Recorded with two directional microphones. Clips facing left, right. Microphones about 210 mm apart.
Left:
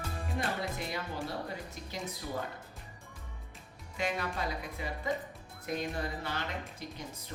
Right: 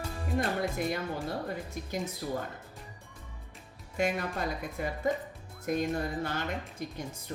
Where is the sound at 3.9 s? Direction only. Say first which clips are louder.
Right 4 dB; 50° right (ahead or behind).